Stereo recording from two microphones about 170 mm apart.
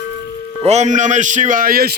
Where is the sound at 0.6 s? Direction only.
40° right (ahead or behind); by 1.9 s 60° right (ahead or behind).